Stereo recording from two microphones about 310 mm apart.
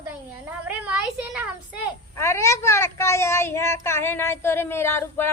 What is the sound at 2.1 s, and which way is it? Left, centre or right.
A woman's voice, centre.